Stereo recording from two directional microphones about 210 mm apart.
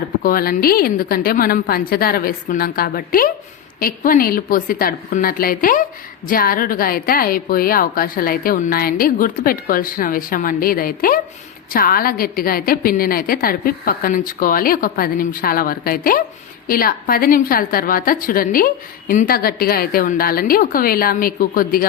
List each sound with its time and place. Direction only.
0.2 s a woman's voice: 45° left (ahead or behind)